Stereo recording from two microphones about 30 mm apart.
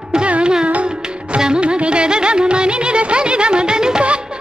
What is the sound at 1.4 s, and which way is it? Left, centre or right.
Music, right.